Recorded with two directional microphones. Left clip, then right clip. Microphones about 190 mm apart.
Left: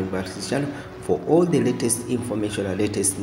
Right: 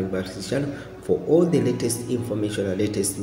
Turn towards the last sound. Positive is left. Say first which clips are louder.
# even
turn(degrees=0)  # may be behind; listen again after turning